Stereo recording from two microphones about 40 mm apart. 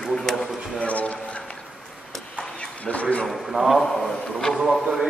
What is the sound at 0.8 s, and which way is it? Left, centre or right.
Speech, left.